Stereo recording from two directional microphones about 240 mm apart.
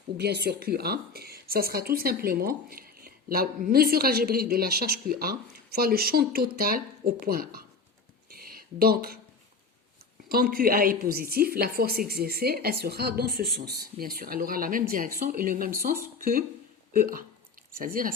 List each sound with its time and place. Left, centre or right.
0.2 s a woman's voice: right
8.3 s a sound: right
10.2 s a woman's voice: right